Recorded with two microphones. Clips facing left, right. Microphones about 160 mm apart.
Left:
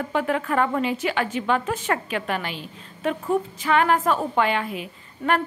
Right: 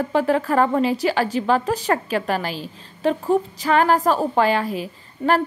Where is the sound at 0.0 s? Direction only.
35° right (ahead or behind).